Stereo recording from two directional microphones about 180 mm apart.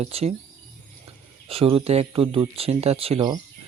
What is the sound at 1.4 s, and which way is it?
Speech, 30° right (ahead or behind).